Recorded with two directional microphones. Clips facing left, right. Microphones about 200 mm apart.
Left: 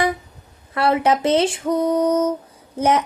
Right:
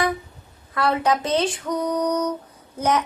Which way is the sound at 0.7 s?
25° left (ahead or behind).